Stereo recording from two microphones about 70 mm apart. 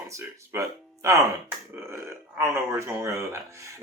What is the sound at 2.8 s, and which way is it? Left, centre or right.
Speech, right.